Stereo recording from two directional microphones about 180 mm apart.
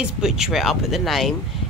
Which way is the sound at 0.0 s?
5° right (ahead or behind).